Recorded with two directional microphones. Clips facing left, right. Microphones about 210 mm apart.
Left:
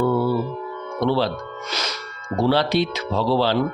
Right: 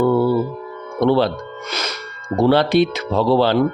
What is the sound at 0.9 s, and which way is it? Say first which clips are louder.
Speech: right 5 dB; 55° right (ahead or behind).